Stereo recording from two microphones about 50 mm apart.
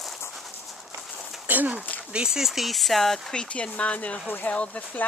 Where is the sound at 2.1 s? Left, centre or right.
Centre.